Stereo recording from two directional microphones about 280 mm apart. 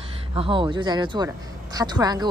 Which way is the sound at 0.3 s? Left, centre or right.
Centre.